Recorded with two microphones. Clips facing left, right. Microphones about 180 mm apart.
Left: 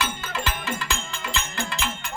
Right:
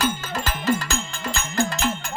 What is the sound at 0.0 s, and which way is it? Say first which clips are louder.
Music: right 4 dB; 40° right (ahead or behind).